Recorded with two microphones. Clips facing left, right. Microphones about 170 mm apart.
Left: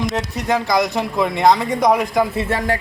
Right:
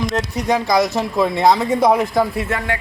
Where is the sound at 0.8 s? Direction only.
20° left (ahead or behind).